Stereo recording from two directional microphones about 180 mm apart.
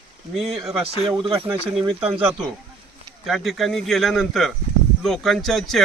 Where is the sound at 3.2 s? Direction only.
Centre (ahead or behind).